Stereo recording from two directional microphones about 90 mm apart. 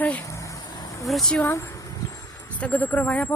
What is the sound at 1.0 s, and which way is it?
Speech, 5° left (ahead or behind).